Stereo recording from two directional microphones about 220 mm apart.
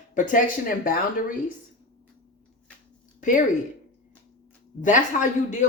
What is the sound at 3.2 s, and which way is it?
Speech, 35° left (ahead or behind).